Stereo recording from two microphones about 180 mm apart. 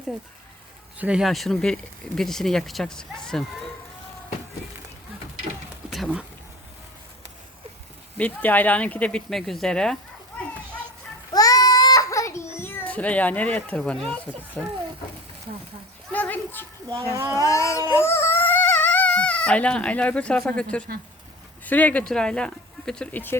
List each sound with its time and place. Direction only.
0.9 s speech: 5° right (ahead or behind)
5.9 s speech: 5° right (ahead or behind)
8.2 s speech: 10° left (ahead or behind)
11.3 s a sound: 20° left (ahead or behind)
14.1 s speech: 10° left (ahead or behind)
16.1 s a sound: 10° left (ahead or behind)
16.9 s a child's voice: 30° right (ahead or behind)
17.2 s speech: 15° right (ahead or behind)
17.4 s speech: 15° left (ahead or behind)
18.0 s a sound: 15° left (ahead or behind)
21.6 s speech: 10° left (ahead or behind)